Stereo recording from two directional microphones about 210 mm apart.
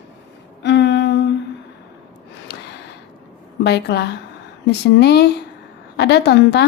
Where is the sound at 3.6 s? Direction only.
55° left (ahead or behind).